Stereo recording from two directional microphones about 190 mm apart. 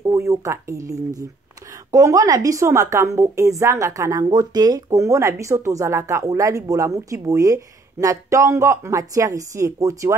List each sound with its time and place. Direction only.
0.0 s a woman's voice: 15° right (ahead or behind)